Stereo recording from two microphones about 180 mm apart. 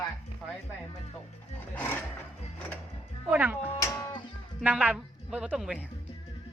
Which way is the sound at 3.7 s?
20° left (ahead or behind).